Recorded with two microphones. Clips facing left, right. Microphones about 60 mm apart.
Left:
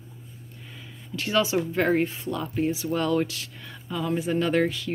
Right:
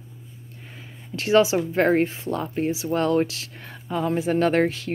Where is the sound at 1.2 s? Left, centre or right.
Right.